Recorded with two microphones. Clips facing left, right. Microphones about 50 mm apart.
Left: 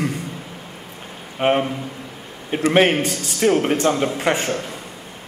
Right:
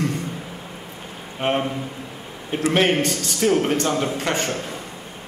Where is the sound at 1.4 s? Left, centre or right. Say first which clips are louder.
Left 4 dB; centre.